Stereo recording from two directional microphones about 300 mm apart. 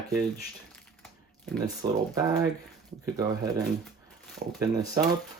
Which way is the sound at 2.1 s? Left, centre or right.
Centre.